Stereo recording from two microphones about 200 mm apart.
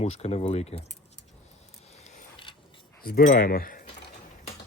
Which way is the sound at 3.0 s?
50° left (ahead or behind).